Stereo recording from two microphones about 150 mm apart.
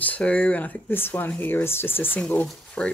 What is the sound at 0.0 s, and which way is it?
Speech, 10° left (ahead or behind).